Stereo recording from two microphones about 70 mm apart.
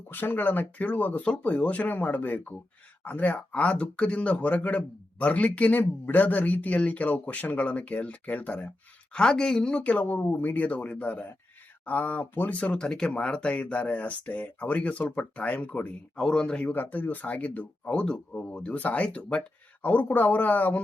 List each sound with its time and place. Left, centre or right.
0.1 s speech: left
16.1 s speech: centre
16.7 s speech: left